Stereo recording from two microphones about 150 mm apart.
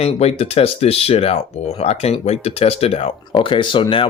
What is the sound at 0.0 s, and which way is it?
Speech, 45° left (ahead or behind).